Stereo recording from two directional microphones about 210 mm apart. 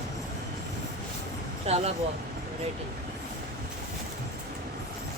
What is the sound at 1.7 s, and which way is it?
Speech, 30° right (ahead or behind).